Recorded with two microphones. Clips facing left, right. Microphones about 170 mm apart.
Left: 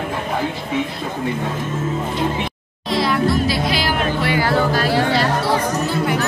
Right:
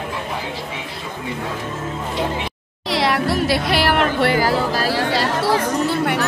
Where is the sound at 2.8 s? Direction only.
75° right (ahead or behind).